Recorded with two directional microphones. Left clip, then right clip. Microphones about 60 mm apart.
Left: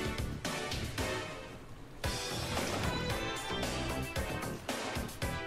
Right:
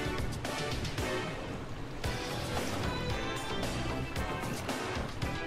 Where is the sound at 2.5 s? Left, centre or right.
Right.